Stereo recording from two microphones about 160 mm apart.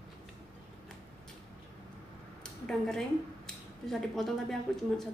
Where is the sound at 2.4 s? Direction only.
5° left (ahead or behind).